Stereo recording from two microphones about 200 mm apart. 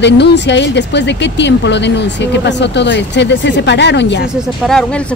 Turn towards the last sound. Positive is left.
turn(degrees=5)  # may be behind; listen again after turning